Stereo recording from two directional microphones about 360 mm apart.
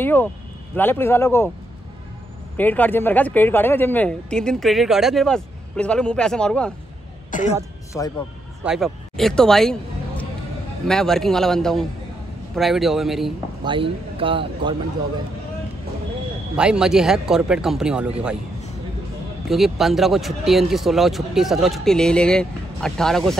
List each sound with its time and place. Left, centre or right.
0.0 s speech: centre
2.5 s speech: centre
7.2 s throat clearing: left
8.0 s speech: centre
13.7 s a man's voice: centre
16.5 s speech: centre
19.4 s speech: centre